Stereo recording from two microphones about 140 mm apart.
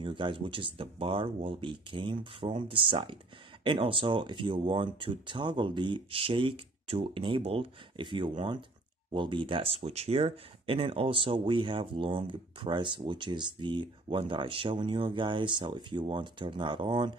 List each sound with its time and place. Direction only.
0.0 s speech: 35° right (ahead or behind)